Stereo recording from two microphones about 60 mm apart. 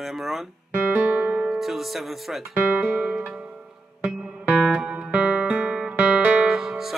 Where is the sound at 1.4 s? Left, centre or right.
Centre.